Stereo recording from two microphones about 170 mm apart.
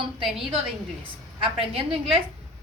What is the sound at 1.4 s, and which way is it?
Speech, 30° right (ahead or behind).